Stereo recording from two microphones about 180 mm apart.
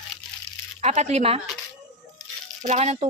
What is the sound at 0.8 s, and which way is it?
Speech, 40° right (ahead or behind).